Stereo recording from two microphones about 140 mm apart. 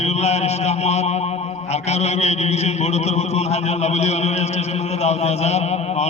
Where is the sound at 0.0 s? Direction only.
50° left (ahead or behind).